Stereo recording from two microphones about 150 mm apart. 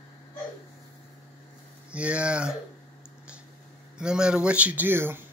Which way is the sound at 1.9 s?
10° right (ahead or behind).